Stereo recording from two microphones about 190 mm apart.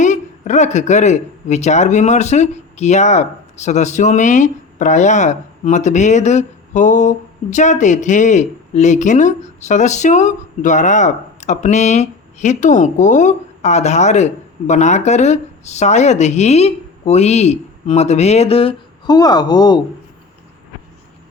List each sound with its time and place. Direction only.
0.0 s speech: 40° left (ahead or behind); by 19.8 s 20° left (ahead or behind)